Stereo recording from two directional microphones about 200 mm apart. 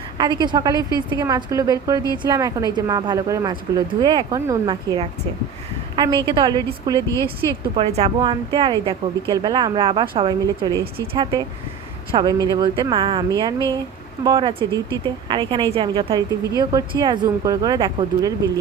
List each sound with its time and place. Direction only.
0.2 s speech: 20° right (ahead or behind)
7.1 s speech: 15° left (ahead or behind)
7.8 s speech: 30° right (ahead or behind)